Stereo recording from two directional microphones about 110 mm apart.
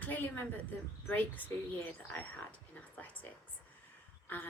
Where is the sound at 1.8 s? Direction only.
15° left (ahead or behind).